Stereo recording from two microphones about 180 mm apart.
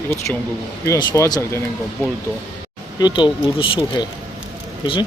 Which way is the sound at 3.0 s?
25° left (ahead or behind).